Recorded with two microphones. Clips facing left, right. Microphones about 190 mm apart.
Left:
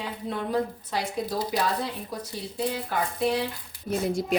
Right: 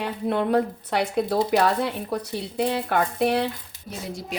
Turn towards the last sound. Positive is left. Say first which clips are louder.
# left 7 dB
turn(degrees=55)  # may be behind; listen again after turning